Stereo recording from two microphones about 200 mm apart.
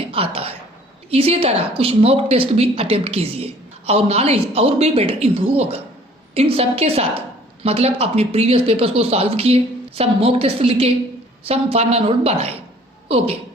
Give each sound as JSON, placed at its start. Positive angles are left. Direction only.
{"t": 0.1, "sound": "a woman's voice", "side_deg": -30}